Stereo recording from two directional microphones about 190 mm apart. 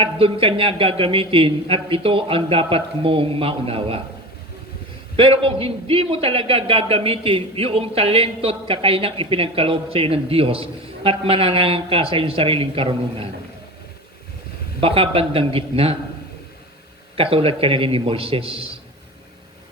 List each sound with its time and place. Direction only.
0.0 s a man's voice: 30° right (ahead or behind)
5.1 s a man's voice: 30° right (ahead or behind)
14.8 s a man's voice: 30° right (ahead or behind)
17.2 s a man's voice: 30° right (ahead or behind)